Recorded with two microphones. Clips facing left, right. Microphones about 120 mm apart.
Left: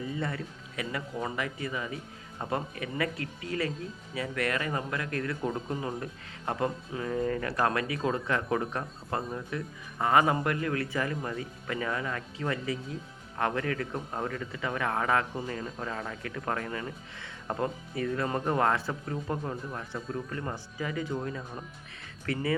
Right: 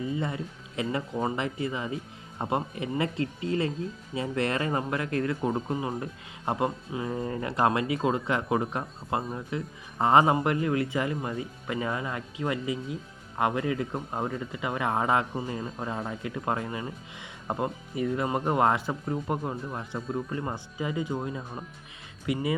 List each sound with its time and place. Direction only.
0.1 s speech: 20° right (ahead or behind)